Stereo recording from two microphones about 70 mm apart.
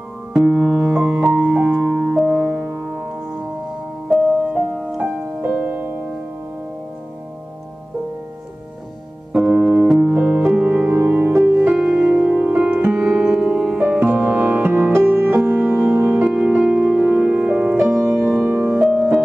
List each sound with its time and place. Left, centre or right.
0.3 s music: centre
4.5 s music: centre
9.3 s music: centre
13.9 s music: right
16.3 s music: centre